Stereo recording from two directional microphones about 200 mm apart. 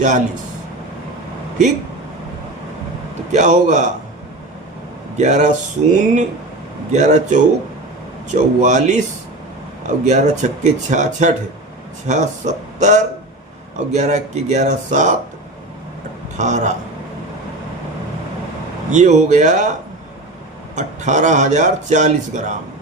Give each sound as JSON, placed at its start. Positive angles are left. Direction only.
{"t": 3.3, "sound": "speech", "side_deg": -35}
{"t": 5.1, "sound": "speech", "side_deg": -35}
{"t": 10.0, "sound": "speech", "side_deg": -35}
{"t": 16.4, "sound": "speech", "side_deg": -35}
{"t": 18.9, "sound": "speech", "side_deg": -35}
{"t": 20.7, "sound": "speech", "side_deg": -35}